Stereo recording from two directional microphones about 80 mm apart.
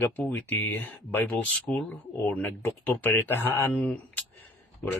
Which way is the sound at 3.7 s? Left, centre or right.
Centre.